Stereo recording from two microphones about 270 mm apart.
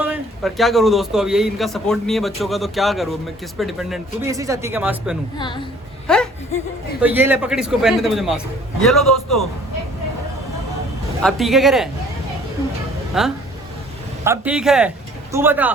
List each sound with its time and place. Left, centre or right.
0.0 s a man's voice: centre
4.3 s speech: centre
5.4 s a woman's voice: centre
6.1 s a man's voice: centre
11.2 s a man's voice: centre
13.2 s a man's voice: centre